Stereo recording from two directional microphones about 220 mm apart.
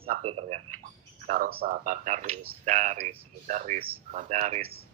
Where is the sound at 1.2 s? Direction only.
35° right (ahead or behind).